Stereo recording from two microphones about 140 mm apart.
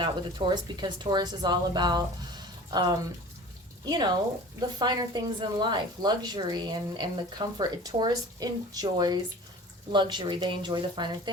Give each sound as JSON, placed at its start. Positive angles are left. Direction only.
{"t": 0.0, "sound": "a woman's voice", "side_deg": -35}